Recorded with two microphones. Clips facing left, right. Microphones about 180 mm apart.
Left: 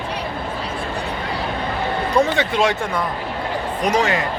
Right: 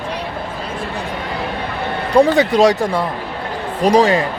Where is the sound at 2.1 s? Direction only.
35° right (ahead or behind).